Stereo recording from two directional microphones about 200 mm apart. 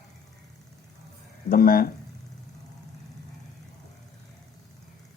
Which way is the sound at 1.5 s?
50° left (ahead or behind).